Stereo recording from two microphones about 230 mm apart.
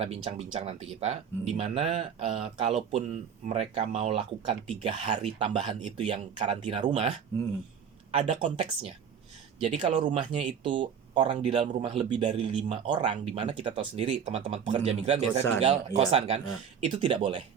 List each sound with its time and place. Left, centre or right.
0.0 s speech: right